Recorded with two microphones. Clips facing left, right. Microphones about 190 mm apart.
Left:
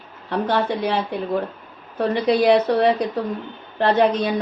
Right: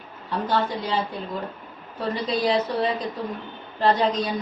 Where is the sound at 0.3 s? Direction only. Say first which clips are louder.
Left 4 dB; 65° left (ahead or behind).